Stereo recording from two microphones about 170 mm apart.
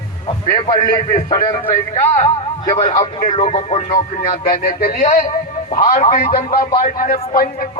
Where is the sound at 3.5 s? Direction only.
45° left (ahead or behind).